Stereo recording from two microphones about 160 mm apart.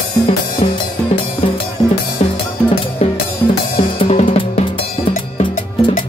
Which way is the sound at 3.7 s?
40° left (ahead or behind).